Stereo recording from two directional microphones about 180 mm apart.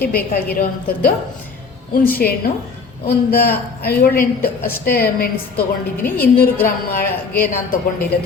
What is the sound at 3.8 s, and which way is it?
A woman's voice, 60° left (ahead or behind).